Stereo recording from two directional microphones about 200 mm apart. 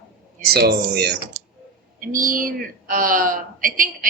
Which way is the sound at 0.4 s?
50° right (ahead or behind).